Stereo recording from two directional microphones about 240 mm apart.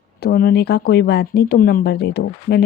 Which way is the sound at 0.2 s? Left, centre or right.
Left.